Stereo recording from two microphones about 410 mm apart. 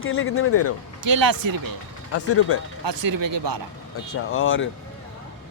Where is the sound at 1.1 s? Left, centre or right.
Right.